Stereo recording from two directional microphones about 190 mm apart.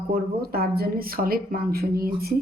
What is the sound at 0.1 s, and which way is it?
Speech, 50° right (ahead or behind).